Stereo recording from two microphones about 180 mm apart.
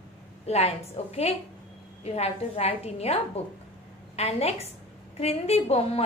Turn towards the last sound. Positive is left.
turn(degrees=35)  # may be behind; listen again after turning